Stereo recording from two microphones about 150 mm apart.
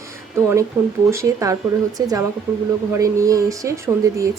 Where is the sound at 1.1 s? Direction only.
20° right (ahead or behind).